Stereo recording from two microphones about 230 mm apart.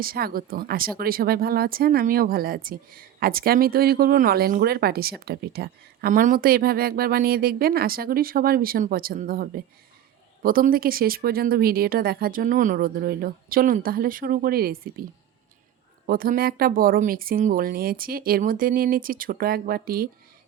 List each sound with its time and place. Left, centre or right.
0.0 s speech: right
16.0 s speech: right